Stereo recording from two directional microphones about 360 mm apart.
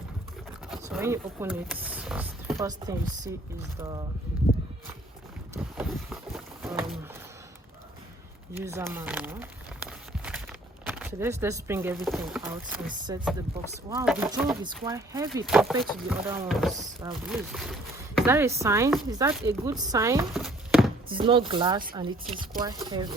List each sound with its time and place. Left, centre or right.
0.7 s speech: centre
3.8 s chopping: centre
5.5 s speech: centre
8.5 s a sound: centre
12.0 s speech: centre
18.5 s chopping: centre
21.1 s chopping: centre